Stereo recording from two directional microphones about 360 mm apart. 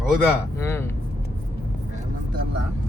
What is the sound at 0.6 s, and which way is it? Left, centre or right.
Speech, centre.